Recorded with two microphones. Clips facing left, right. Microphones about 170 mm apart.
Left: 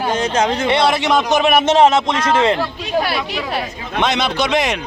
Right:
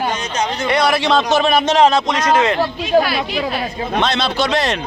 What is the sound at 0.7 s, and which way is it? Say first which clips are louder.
A man's voice: right 3 dB; 25° left (ahead or behind).